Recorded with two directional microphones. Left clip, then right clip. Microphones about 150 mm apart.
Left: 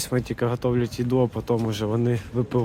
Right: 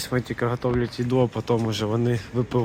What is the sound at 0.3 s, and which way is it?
Speech, 10° left (ahead or behind).